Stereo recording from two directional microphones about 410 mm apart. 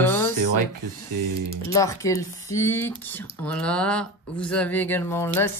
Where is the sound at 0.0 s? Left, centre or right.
Centre.